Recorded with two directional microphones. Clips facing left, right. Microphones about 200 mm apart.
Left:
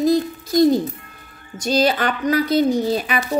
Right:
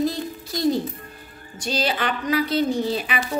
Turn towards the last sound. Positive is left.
turn(degrees=45)  # may be behind; listen again after turning